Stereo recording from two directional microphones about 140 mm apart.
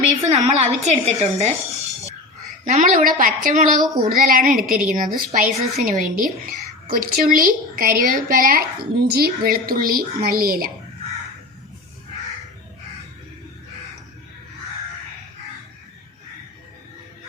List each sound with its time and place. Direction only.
0.2 s a woman's voice: 50° right (ahead or behind)
2.6 s a woman's voice: 65° right (ahead or behind)
3.9 s a woman's voice: 90° right